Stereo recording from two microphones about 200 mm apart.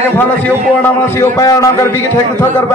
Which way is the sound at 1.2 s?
15° left (ahead or behind).